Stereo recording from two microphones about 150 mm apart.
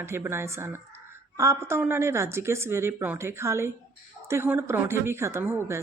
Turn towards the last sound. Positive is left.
turn(degrees=-15)  # may be behind; listen again after turning